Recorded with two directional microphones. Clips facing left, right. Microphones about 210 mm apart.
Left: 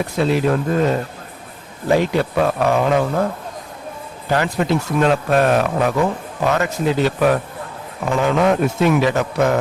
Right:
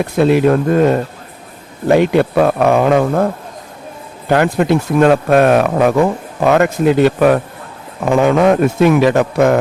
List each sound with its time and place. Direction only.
0.2 s speech: 55° right (ahead or behind)
4.3 s speech: 55° right (ahead or behind)